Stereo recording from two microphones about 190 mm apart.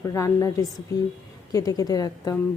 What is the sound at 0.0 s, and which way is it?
A woman's voice, 15° left (ahead or behind).